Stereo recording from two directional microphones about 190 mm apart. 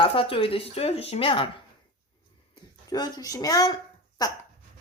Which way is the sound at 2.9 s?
20° left (ahead or behind).